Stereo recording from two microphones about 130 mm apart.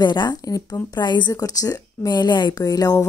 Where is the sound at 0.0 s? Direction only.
35° left (ahead or behind).